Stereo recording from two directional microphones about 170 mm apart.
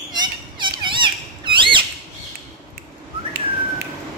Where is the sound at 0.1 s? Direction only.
25° right (ahead or behind).